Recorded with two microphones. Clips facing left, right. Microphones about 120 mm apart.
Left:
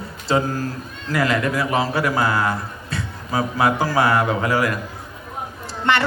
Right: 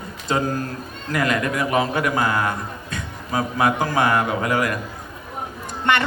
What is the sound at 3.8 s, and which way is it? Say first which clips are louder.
Speech: left 1 dB; 30° left (ahead or behind).